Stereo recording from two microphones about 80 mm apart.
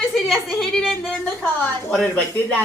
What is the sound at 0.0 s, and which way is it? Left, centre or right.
A woman's voice, centre.